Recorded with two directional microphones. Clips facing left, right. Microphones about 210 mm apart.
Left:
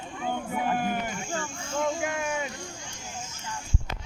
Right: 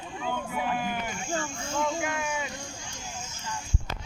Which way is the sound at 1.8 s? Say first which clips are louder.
Left 3 dB; 45° left (ahead or behind).